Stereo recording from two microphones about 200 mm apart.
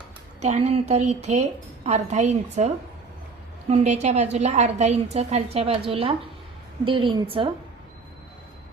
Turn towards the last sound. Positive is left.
turn(degrees=-25)  # may be behind; listen again after turning